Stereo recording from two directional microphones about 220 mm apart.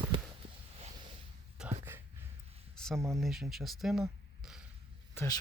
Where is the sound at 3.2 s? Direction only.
Centre (ahead or behind).